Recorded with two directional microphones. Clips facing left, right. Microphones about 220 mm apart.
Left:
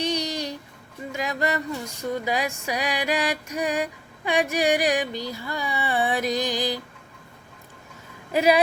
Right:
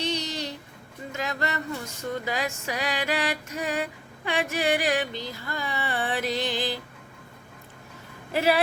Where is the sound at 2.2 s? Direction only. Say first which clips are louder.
Left 3 dB; 15° left (ahead or behind).